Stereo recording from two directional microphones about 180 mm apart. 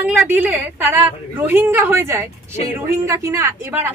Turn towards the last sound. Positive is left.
turn(degrees=-10)  # may be behind; listen again after turning